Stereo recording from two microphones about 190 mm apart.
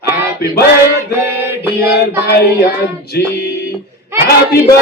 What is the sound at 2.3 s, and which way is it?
A man's voice, 55° left (ahead or behind).